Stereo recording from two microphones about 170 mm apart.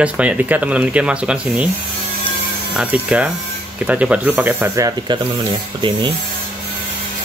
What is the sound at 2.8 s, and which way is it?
Speech, 10° right (ahead or behind).